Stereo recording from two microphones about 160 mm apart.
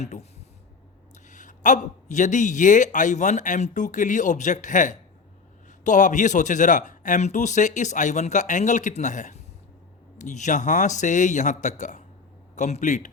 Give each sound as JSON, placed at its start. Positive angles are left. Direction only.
{"t": 0.0, "sound": "a man's voice", "side_deg": 45}